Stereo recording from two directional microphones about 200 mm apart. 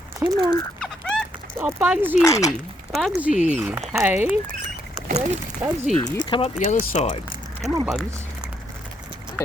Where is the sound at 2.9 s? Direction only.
Centre (ahead or behind).